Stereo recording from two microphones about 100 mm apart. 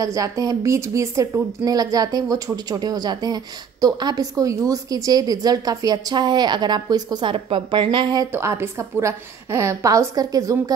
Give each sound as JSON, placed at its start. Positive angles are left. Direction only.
{"t": 0.0, "sound": "a woman's voice", "side_deg": -35}
{"t": 8.3, "sound": "a woman's voice", "side_deg": -25}